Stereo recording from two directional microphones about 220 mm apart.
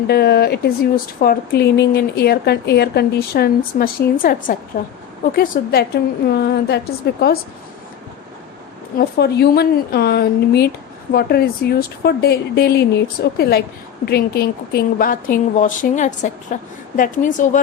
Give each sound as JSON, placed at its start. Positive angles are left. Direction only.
{"t": 0.1, "sound": "a woman's voice", "side_deg": 45}
{"t": 9.0, "sound": "a woman's voice", "side_deg": 45}